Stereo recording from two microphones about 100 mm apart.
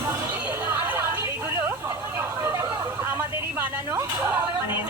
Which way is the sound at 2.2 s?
25° right (ahead or behind).